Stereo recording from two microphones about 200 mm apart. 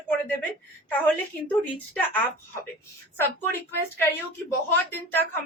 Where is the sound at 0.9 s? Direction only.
10° left (ahead or behind).